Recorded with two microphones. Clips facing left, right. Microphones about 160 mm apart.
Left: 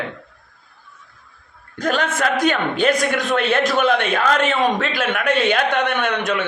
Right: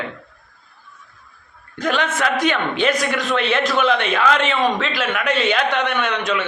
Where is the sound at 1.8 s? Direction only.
40° left (ahead or behind).